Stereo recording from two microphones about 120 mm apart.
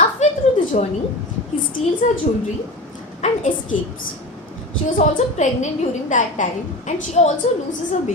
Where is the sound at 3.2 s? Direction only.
75° left (ahead or behind).